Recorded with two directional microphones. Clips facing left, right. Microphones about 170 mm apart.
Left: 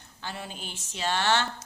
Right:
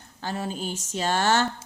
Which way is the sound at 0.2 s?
40° right (ahead or behind).